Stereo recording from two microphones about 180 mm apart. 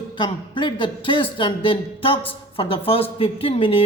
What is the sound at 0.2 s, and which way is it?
Speech, 25° left (ahead or behind).